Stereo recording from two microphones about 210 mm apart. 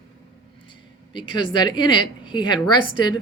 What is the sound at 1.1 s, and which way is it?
Speech, 25° left (ahead or behind).